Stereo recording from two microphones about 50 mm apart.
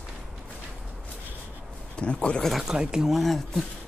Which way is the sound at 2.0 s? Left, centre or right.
Left.